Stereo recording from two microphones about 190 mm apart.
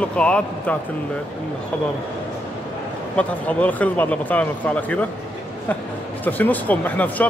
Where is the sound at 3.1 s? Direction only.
5° left (ahead or behind).